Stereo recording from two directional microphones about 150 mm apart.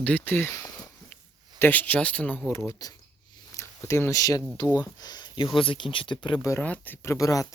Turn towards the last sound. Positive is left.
turn(degrees=20)  # may be behind; listen again after turning